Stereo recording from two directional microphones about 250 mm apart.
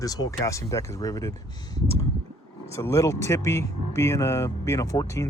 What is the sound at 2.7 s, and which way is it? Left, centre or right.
Speech, centre.